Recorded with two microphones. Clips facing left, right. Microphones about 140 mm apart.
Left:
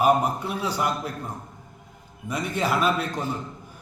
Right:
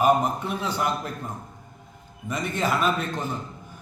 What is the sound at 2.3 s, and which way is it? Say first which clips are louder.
Speech: even; 10° left (ahead or behind).